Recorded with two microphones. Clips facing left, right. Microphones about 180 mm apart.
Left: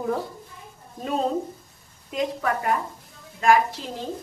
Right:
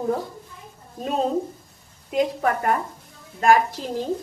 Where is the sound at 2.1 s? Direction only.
40° right (ahead or behind).